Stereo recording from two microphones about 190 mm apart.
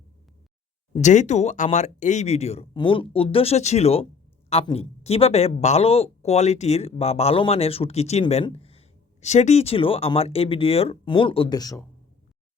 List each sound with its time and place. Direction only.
0.9 s speech: 40° left (ahead or behind); by 11.8 s 20° left (ahead or behind)